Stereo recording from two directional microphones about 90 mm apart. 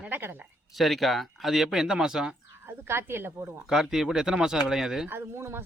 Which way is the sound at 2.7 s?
25° right (ahead or behind).